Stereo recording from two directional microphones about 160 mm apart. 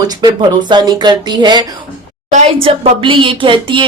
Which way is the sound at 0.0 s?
25° right (ahead or behind).